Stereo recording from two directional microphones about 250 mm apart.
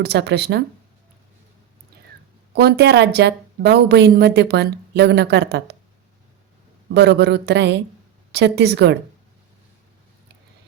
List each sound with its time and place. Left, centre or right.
0.0 s speech: right
2.6 s speech: right
6.9 s speech: right